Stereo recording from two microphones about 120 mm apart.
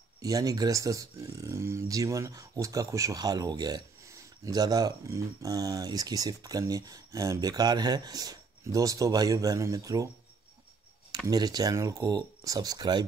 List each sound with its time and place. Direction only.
0.2 s speech: 30° right (ahead or behind)
11.2 s speech: 30° right (ahead or behind)